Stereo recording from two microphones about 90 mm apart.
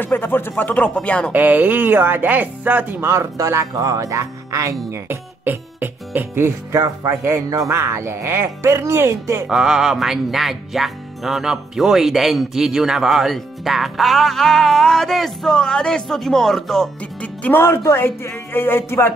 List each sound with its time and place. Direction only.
0.0 s speech: 25° left (ahead or behind)
1.3 s speech: 20° right (ahead or behind)
3.1 s speech: 35° right (ahead or behind)
5.0 s speech: 25° right (ahead or behind)
9.5 s speech: 5° right (ahead or behind)
17.2 s speech: 20° left (ahead or behind)